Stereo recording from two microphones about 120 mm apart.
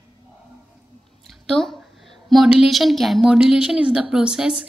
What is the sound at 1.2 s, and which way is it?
A woman's voice, centre (ahead or behind).